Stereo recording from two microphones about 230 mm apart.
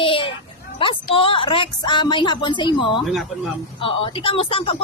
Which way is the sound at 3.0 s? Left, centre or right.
Centre.